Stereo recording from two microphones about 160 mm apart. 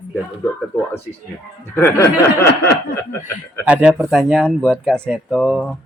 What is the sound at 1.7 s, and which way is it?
Speech, 15° left (ahead or behind).